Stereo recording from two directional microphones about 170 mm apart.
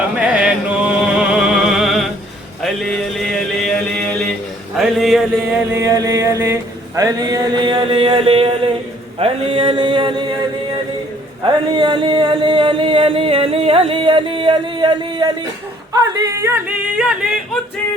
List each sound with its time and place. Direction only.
0.2 s music: 5° right (ahead or behind)
2.6 s mantra: centre (ahead or behind)
4.8 s chant: centre (ahead or behind)
5.7 s a sound: 20° right (ahead or behind)
9.1 s music: 35° right (ahead or behind)
11.8 s music: 30° right (ahead or behind)
15.9 s yodeling: 20° right (ahead or behind)
16.6 s chant: 5° right (ahead or behind)